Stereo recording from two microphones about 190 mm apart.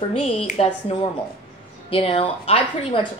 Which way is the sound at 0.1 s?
30° left (ahead or behind).